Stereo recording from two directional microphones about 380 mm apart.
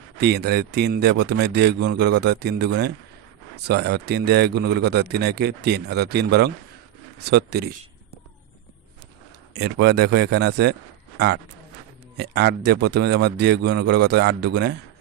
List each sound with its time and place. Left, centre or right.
0.2 s a man's voice: right
9.5 s a man's voice: right